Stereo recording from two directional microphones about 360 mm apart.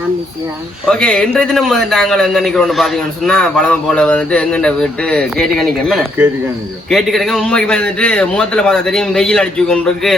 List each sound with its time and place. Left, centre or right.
0.9 s a man's voice: centre